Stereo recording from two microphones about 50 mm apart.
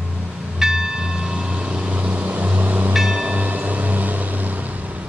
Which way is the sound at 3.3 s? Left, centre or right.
Right.